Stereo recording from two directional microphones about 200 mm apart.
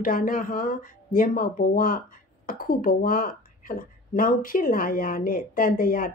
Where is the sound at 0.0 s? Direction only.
45° left (ahead or behind).